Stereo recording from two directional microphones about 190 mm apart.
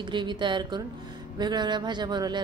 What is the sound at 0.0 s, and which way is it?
A man's voice, 25° right (ahead or behind).